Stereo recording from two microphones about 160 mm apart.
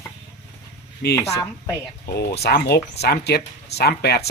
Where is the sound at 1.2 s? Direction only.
20° left (ahead or behind).